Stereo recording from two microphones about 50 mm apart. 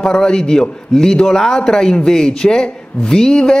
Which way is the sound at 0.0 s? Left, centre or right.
Centre.